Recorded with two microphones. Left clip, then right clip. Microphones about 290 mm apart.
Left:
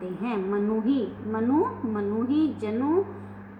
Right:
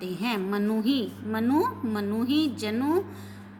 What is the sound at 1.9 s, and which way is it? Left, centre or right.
Speech, right.